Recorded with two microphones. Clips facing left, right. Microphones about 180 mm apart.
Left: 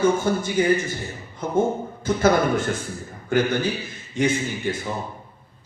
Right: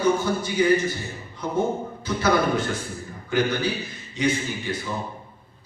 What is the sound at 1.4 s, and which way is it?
A man's voice, 50° left (ahead or behind).